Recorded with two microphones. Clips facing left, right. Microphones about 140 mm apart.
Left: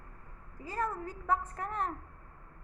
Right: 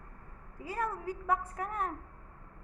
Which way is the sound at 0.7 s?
10° right (ahead or behind).